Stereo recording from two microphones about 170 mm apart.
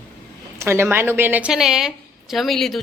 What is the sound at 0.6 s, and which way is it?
A woman's voice, 15° right (ahead or behind).